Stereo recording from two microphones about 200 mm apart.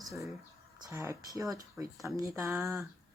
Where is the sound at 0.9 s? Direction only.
15° right (ahead or behind).